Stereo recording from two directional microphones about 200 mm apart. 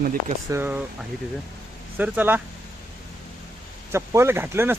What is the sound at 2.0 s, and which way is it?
Speech, 10° right (ahead or behind).